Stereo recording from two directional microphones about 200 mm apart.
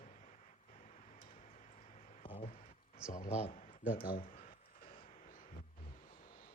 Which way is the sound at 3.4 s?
40° left (ahead or behind).